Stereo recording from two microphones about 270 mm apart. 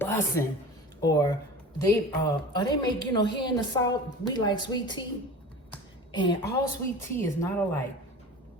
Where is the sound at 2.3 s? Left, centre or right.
Centre.